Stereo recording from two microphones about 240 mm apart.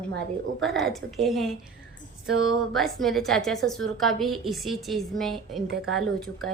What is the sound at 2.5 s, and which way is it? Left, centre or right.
A woman's voice, centre.